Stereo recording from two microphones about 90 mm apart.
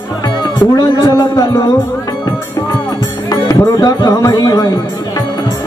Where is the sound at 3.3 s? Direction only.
45° left (ahead or behind).